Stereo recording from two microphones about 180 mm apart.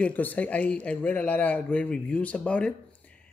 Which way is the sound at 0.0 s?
10° left (ahead or behind).